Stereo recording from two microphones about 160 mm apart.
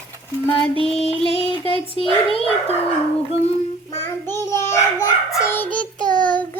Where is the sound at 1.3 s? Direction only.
35° left (ahead or behind).